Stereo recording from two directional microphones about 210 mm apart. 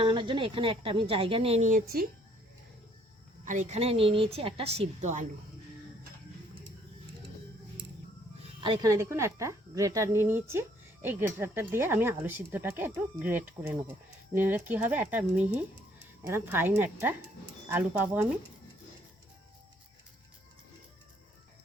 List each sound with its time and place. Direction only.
0.0 s a woman's voice: 25° right (ahead or behind); by 2.0 s 40° right (ahead or behind)
3.4 s a woman's voice: 35° right (ahead or behind)
8.6 s speech: 20° right (ahead or behind)